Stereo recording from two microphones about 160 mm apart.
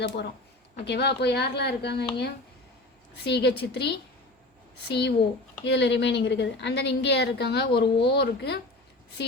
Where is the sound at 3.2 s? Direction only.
90° left.